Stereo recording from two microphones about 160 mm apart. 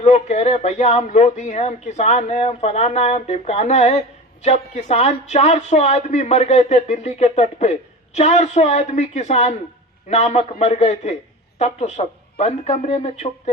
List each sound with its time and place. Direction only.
0.0 s speech: 45° left (ahead or behind)